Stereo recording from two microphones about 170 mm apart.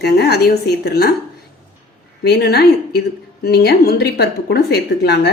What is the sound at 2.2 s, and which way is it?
A woman's voice, 75° left (ahead or behind).